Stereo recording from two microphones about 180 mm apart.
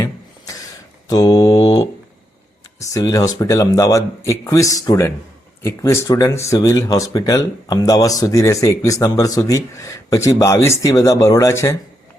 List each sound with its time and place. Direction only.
1.0 s mantra: 20° left (ahead or behind)
2.9 s speech: 20° left (ahead or behind)